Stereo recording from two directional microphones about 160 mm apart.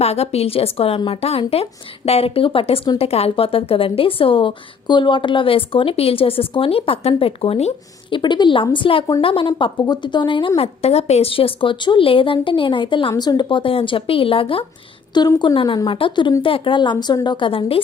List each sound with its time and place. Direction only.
0.0 s a woman's voice: 40° left (ahead or behind)